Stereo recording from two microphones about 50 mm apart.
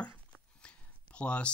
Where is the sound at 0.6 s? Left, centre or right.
Left.